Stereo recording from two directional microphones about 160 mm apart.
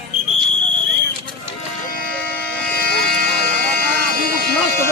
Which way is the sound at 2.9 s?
90° left.